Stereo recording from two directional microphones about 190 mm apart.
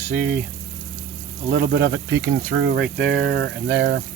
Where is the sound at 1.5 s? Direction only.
55° right (ahead or behind).